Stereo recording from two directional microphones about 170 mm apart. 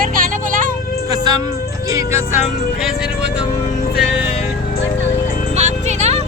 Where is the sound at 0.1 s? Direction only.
55° right (ahead or behind).